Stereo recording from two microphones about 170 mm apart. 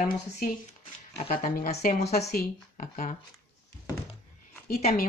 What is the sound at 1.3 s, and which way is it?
Speech, 55° left (ahead or behind).